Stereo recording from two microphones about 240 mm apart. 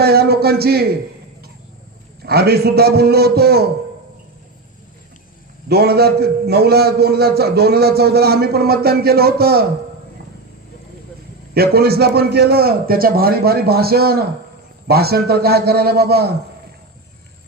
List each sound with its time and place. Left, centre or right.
0.0 s a sound: right
2.2 s a man's voice: right
5.6 s a man's voice: right
11.5 s a man's voice: right